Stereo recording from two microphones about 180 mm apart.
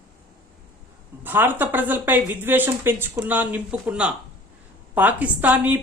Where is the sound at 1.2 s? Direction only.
10° right (ahead or behind).